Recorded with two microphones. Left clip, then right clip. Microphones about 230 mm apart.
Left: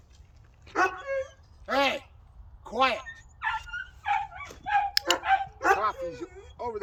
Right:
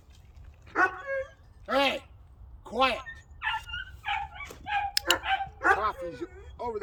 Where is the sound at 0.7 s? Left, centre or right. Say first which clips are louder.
Even; left.